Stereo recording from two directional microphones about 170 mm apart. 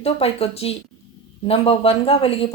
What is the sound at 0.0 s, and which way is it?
Speech, 35° left (ahead or behind).